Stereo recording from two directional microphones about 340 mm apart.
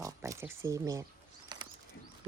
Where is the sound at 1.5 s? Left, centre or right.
Centre.